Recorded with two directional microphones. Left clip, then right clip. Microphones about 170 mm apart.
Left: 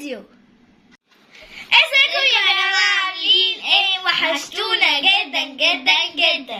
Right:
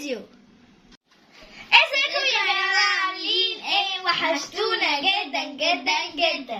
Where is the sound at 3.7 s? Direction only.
10° left (ahead or behind).